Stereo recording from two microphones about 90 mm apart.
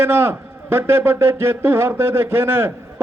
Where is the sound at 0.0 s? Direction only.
25° right (ahead or behind).